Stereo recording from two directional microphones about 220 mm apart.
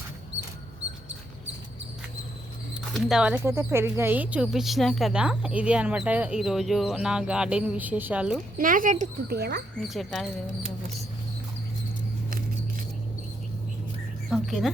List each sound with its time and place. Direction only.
2.9 s speech: 5° right (ahead or behind)
8.5 s speech: 40° right (ahead or behind)
9.9 s speech: centre (ahead or behind)
14.3 s a sound: centre (ahead or behind)